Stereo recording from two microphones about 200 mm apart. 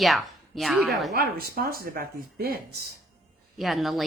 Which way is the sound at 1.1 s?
50° right (ahead or behind).